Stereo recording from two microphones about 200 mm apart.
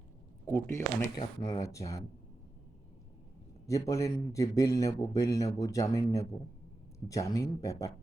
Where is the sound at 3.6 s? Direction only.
15° left (ahead or behind).